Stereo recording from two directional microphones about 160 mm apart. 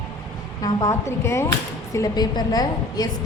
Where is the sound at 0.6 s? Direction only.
20° left (ahead or behind).